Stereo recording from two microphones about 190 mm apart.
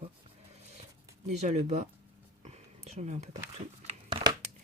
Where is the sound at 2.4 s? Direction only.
35° right (ahead or behind).